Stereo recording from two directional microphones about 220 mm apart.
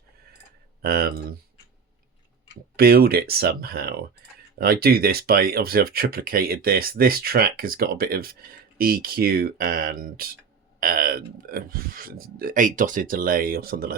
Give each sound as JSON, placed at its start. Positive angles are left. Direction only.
{"t": 0.8, "sound": "speech", "side_deg": -45}
{"t": 2.7, "sound": "speech", "side_deg": -45}